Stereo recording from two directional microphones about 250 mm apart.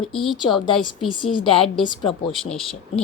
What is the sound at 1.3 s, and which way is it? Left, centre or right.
A woman's voice, centre.